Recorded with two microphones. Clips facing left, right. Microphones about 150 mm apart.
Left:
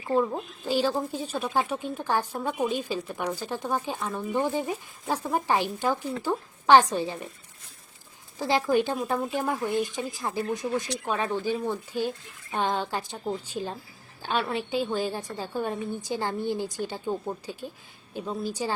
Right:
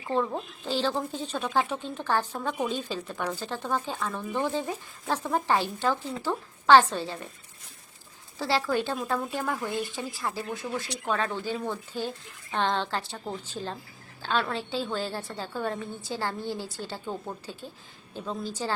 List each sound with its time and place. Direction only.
0.1 s a woman's voice: 10° left (ahead or behind)
8.4 s a woman's voice: 15° left (ahead or behind)